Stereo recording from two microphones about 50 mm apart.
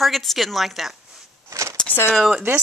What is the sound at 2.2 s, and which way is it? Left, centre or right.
Speech, centre.